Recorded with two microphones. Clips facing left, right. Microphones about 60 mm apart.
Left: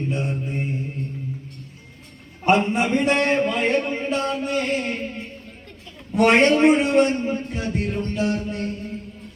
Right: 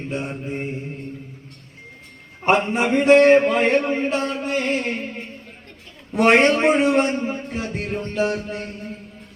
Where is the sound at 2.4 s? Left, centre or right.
Right.